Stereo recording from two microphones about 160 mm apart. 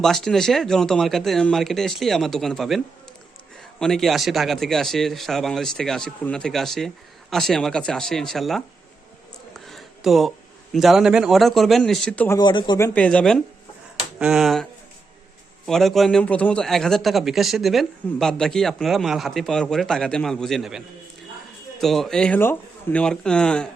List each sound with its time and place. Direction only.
0.0 s a man's voice: 5° left (ahead or behind)
12.4 s speech: 30° left (ahead or behind)
12.8 s a man's voice: 10° left (ahead or behind)